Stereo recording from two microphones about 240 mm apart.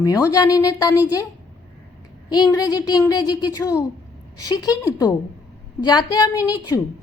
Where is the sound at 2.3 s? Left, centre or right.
Centre.